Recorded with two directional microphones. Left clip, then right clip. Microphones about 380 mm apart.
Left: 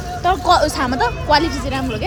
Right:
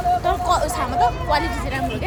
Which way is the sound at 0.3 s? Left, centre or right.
Left.